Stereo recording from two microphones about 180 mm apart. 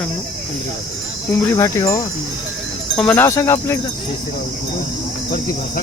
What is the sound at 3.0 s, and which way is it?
Cricket, 10° left (ahead or behind).